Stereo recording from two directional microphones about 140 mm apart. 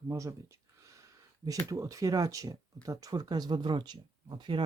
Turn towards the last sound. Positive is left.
turn(degrees=-35)  # may be behind; listen again after turning